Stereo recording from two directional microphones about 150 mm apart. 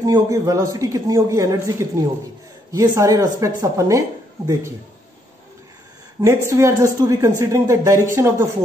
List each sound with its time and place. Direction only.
0.0 s a man's voice: 20° right (ahead or behind)
6.2 s a man's voice: 15° right (ahead or behind)